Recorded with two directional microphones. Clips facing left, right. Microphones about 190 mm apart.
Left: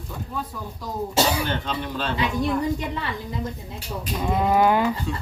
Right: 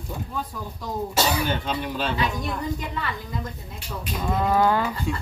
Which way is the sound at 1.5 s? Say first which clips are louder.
Right 1 dB; 10° right (ahead or behind).